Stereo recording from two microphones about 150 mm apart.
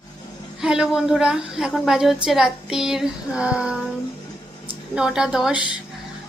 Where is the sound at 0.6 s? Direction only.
5° right (ahead or behind).